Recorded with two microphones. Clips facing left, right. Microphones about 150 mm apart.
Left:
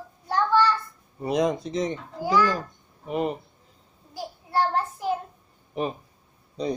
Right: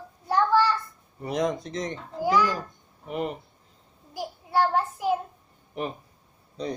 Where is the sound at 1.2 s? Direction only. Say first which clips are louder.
Left 3 dB; 10° left (ahead or behind).